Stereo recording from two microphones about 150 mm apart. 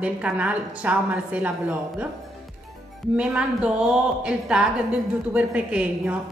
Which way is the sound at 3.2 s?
5° right (ahead or behind).